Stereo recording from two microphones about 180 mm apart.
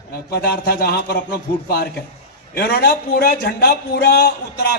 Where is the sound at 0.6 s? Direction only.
55° left (ahead or behind).